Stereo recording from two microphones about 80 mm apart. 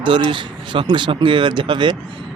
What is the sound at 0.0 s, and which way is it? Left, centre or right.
Speech, right.